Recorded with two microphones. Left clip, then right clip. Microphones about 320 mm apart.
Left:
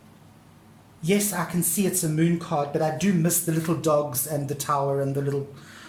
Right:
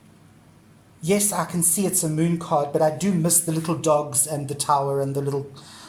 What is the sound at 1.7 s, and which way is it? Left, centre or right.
Speech, centre.